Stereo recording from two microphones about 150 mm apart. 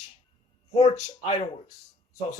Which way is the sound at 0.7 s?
45° left (ahead or behind).